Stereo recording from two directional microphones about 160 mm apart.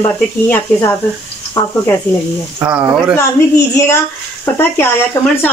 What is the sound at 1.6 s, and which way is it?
Speech, 15° left (ahead or behind).